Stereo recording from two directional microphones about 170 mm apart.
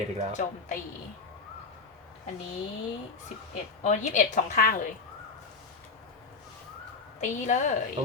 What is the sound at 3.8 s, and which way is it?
A woman's voice, 45° left (ahead or behind).